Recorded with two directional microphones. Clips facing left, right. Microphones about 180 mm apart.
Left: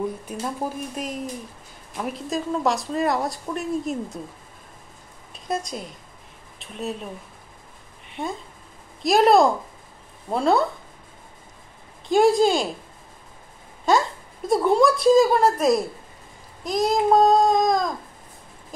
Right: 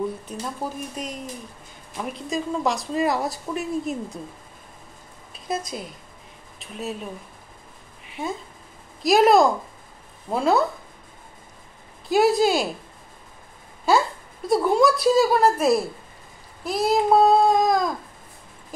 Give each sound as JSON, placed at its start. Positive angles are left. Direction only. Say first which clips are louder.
{"t": 0.2, "sound": "speech", "louder": "left 2 dB", "side_deg": 10}
{"t": 5.3, "sound": "a woman's voice", "louder": "left 1 dB", "side_deg": 0}
{"t": 8.1, "sound": "speech", "louder": "even", "side_deg": 0}
{"t": 12.1, "sound": "speech", "louder": "left 1 dB", "side_deg": -5}
{"t": 14.5, "sound": "a woman's voice", "louder": "even", "side_deg": -5}